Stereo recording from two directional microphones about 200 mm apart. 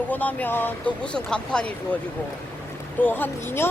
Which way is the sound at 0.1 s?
10° left (ahead or behind).